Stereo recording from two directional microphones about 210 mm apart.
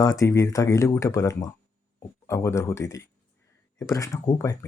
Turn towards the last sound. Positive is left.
turn(degrees=15)  # may be behind; listen again after turning